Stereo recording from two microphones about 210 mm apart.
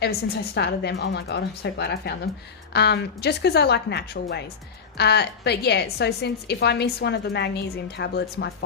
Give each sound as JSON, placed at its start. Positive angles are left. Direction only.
{"t": 0.5, "sound": "a woman's voice", "side_deg": 55}